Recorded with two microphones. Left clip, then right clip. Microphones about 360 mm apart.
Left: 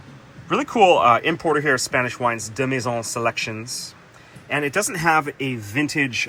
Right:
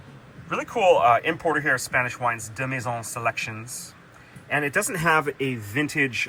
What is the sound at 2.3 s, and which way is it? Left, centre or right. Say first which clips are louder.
Speech: left 4 dB; left.